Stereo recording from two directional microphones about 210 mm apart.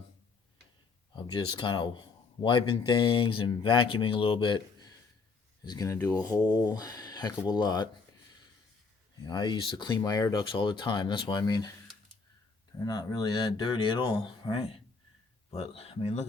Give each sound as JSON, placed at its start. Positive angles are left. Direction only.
{"t": 1.1, "sound": "speech", "side_deg": 20}
{"t": 9.3, "sound": "speech", "side_deg": 20}
{"t": 12.8, "sound": "speech", "side_deg": 20}